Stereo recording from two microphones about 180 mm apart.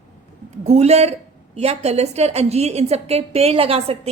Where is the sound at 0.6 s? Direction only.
40° right (ahead or behind).